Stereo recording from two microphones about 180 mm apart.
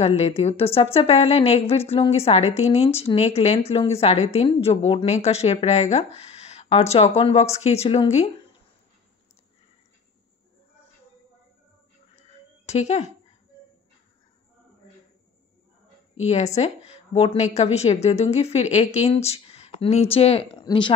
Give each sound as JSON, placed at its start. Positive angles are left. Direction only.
{"t": 0.0, "sound": "a woman's voice", "side_deg": 35}
{"t": 12.6, "sound": "speech", "side_deg": 35}
{"t": 16.3, "sound": "a woman's voice", "side_deg": 35}